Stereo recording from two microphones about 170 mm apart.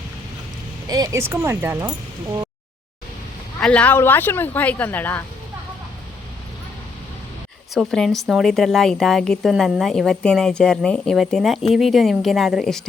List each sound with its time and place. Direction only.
0.9 s speech: 20° right (ahead or behind)
3.6 s speech: 5° left (ahead or behind)
7.7 s speech: centre (ahead or behind)